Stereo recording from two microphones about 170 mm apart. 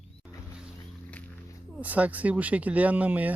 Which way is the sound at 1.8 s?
10° right (ahead or behind).